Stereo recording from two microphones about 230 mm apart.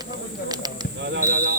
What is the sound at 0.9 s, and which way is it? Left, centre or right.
Speech, right.